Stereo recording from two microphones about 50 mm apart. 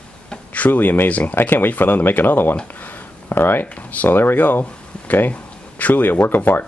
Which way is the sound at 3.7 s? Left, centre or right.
Left.